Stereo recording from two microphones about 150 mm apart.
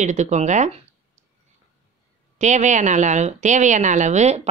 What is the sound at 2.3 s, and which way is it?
Speech, 50° right (ahead or behind).